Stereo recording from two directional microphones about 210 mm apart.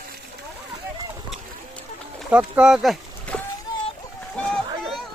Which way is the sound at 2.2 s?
5° right (ahead or behind).